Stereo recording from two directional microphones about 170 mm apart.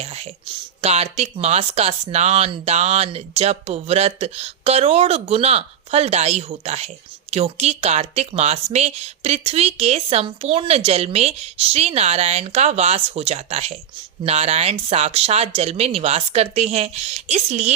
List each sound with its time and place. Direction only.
0.0 s speech: 35° right (ahead or behind)